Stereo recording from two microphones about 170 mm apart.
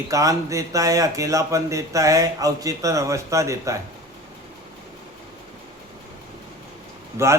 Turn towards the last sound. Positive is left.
turn(degrees=-15)  # may be behind; listen again after turning